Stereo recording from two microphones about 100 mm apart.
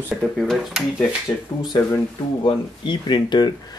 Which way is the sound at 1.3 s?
45° left (ahead or behind).